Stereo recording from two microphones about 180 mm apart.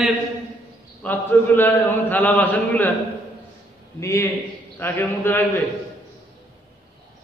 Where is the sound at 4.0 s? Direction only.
15° left (ahead or behind).